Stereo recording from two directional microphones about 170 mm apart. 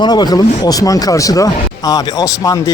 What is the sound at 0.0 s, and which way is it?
A man's voice, 25° left (ahead or behind).